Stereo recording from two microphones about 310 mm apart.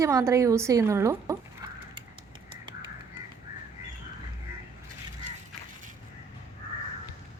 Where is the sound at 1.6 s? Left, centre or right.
Centre.